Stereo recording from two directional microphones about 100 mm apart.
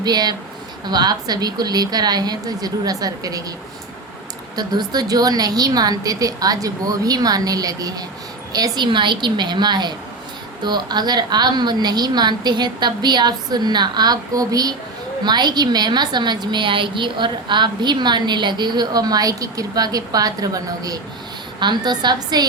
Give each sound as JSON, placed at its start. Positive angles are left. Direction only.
{"t": 0.0, "sound": "a woman's voice", "side_deg": -45}
{"t": 4.5, "sound": "a woman's voice", "side_deg": -45}